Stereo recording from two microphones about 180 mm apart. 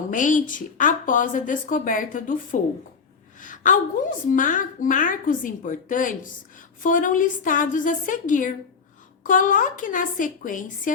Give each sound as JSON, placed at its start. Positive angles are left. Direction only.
{"t": 0.1, "sound": "a woman's voice", "side_deg": 45}
{"t": 3.4, "sound": "a sound", "side_deg": 45}
{"t": 4.3, "sound": "a woman's voice", "side_deg": 50}